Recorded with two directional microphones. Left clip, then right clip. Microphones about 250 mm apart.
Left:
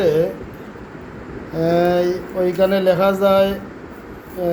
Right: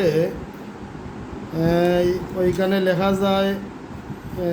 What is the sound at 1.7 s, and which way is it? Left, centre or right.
Speech, centre.